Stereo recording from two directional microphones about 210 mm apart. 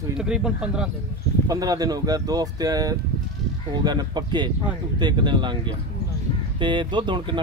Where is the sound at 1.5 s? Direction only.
15° right (ahead or behind).